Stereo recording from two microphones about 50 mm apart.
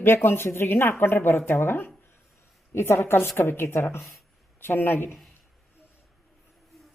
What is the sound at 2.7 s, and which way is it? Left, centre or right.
Speech, left.